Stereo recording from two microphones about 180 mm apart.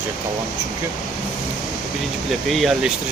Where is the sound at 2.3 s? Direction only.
Centre (ahead or behind).